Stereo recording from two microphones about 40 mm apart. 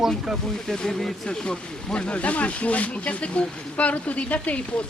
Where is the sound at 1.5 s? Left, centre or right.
Left.